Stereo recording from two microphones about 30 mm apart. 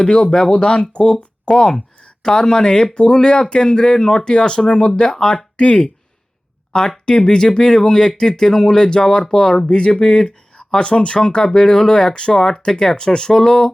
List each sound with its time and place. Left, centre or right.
0.1 s speech: left
5.0 s speech: centre
5.5 s speech: left
7.0 s speech: left
9.6 s speech: left
11.4 s speech: centre